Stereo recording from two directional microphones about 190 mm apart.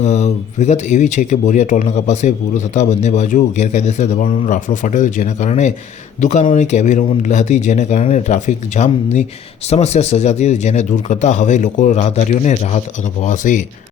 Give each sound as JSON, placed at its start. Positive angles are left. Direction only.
{"t": 0.0, "sound": "speech", "side_deg": 35}